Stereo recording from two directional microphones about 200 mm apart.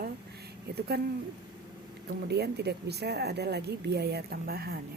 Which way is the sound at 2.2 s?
55° right (ahead or behind).